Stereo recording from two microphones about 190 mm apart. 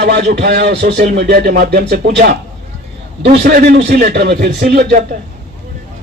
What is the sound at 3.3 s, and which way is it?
A man's voice, 60° right (ahead or behind).